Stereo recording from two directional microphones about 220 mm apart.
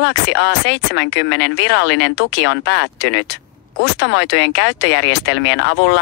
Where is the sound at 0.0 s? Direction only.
55° left (ahead or behind).